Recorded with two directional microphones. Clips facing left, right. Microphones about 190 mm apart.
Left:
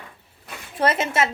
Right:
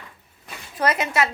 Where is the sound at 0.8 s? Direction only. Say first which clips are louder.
Left 1 dB; 25° left (ahead or behind).